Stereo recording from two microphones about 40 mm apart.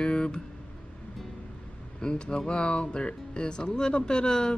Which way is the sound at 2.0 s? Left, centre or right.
Left.